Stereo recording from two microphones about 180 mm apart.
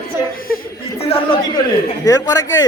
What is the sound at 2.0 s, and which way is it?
Speech, 20° left (ahead or behind).